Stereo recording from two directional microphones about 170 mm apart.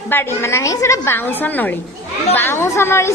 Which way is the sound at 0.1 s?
15° left (ahead or behind).